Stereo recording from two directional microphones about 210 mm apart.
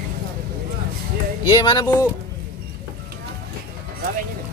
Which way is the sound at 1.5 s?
25° left (ahead or behind).